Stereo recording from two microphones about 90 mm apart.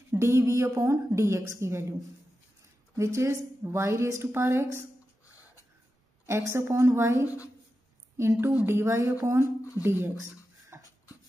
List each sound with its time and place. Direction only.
0.1 s a woman's voice: 30° right (ahead or behind)
6.2 s a woman's voice: 30° right (ahead or behind)
10.7 s beatboxing: 30° right (ahead or behind)